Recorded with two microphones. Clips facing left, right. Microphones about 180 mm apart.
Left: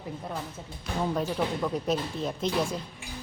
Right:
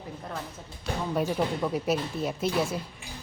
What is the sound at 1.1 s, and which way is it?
Speech, 10° right (ahead or behind).